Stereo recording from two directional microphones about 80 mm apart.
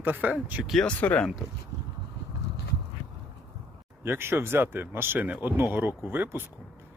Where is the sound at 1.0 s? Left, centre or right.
Centre.